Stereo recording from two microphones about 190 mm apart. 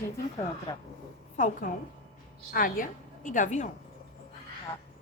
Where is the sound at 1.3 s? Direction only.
40° left (ahead or behind).